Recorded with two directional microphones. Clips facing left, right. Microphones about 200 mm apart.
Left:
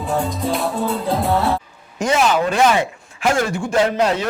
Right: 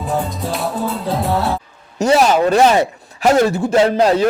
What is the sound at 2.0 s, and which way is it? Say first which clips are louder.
Speech: right 4 dB; 40° right (ahead or behind).